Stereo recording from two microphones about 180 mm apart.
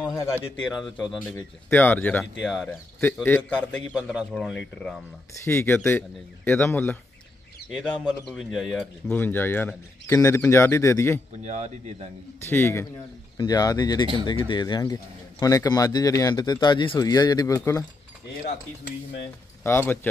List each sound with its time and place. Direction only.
0.1 s speech: 15° left (ahead or behind)
3.9 s a man's voice: 5° right (ahead or behind)
8.0 s speech: centre (ahead or behind)
11.4 s speech: 40° right (ahead or behind)
12.4 s speech: 15° left (ahead or behind)
19.6 s speech: 10° left (ahead or behind)